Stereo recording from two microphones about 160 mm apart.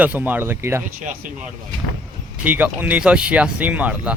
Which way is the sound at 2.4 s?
10° right (ahead or behind).